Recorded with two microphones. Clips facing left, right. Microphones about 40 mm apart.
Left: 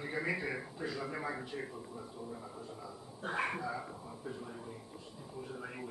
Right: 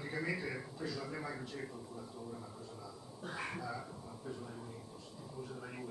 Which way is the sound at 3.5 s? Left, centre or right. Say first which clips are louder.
Left 3 dB; centre.